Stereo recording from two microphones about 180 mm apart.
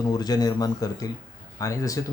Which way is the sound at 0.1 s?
20° left (ahead or behind).